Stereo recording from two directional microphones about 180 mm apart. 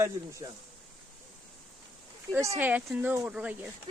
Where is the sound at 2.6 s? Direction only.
10° right (ahead or behind).